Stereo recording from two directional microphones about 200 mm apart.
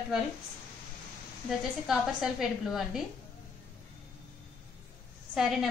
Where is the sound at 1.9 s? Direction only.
Centre (ahead or behind).